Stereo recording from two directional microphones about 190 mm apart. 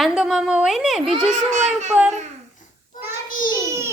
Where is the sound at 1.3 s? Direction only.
40° right (ahead or behind).